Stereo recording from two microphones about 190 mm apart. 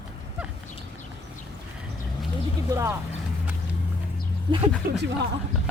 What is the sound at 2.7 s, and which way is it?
Speech, 15° right (ahead or behind).